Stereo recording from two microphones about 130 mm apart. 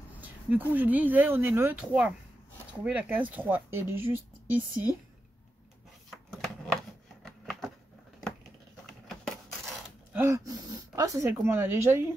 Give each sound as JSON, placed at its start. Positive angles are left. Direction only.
{"t": 0.2, "sound": "speech", "side_deg": -15}
{"t": 6.3, "sound": "a sound", "side_deg": 5}
{"t": 9.1, "sound": "coin", "side_deg": 0}
{"t": 10.1, "sound": "speech", "side_deg": -20}